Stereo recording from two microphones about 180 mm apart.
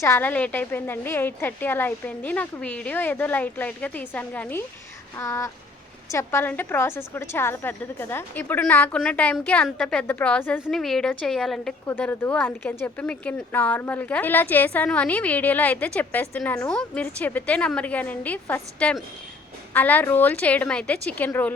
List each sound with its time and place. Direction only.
0.0 s speech: 15° left (ahead or behind)